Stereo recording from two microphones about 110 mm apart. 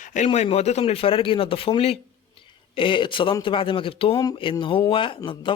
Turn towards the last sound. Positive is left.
turn(degrees=50)  # may be behind; listen again after turning